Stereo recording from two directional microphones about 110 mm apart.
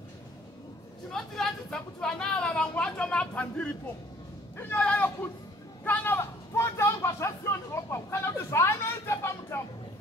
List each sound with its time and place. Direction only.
1.1 s speech: 5° left (ahead or behind); by 9.6 s 25° left (ahead or behind)